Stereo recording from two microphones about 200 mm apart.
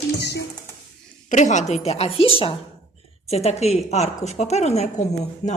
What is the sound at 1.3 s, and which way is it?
A woman's voice, 35° left (ahead or behind).